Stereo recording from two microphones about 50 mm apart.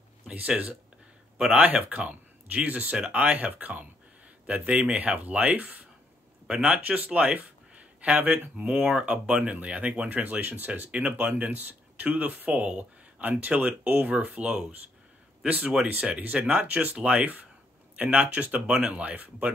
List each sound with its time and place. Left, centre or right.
0.3 s speech: right
8.9 s speech: centre; by 14.1 s right
14.3 s speech: right
16.9 s speech: right